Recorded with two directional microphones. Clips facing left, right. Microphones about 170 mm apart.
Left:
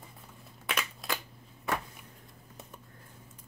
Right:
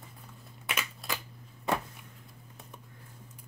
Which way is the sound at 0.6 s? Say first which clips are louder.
Left 2 dB; centre (ahead or behind).